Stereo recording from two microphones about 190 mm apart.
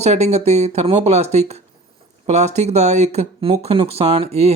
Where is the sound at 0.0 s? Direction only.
35° right (ahead or behind).